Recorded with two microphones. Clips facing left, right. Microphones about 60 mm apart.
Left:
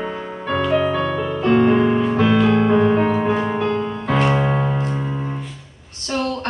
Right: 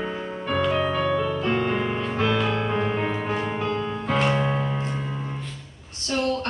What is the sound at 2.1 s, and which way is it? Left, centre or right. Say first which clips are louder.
Music: left 8 dB; centre.